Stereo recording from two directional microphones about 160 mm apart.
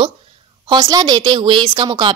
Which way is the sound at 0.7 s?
25° right (ahead or behind).